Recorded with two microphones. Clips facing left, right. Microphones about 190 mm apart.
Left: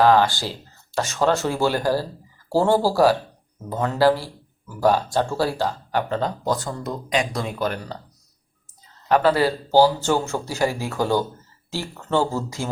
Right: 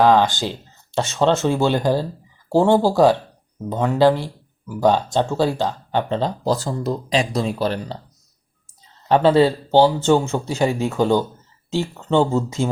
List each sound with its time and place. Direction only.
0.0 s speech: 15° right (ahead or behind)
9.0 s speech: 25° right (ahead or behind)